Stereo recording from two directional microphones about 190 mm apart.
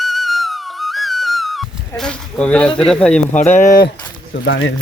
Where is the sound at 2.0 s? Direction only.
5° left (ahead or behind).